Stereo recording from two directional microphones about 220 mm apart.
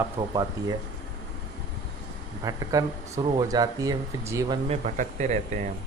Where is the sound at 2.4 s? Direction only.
15° right (ahead or behind).